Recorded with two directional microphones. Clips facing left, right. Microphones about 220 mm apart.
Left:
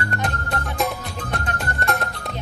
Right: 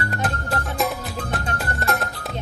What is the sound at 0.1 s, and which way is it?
Music, centre (ahead or behind).